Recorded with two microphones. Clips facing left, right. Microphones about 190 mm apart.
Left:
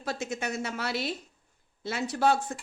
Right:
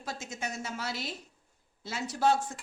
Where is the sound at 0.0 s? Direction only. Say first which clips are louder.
Left 6 dB; 65° left (ahead or behind).